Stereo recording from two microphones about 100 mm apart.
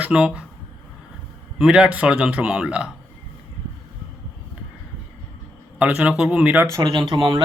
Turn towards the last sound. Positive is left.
turn(degrees=-55)  # may be behind; listen again after turning